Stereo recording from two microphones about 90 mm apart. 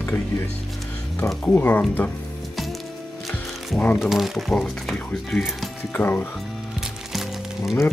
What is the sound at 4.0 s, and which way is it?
Speech, 5° right (ahead or behind).